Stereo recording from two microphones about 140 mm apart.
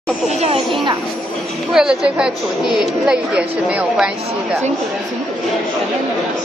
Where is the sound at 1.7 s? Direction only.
5° right (ahead or behind).